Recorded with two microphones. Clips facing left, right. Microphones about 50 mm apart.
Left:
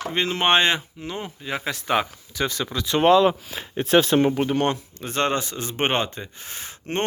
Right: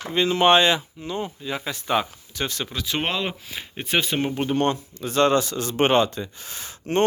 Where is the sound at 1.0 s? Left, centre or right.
Left.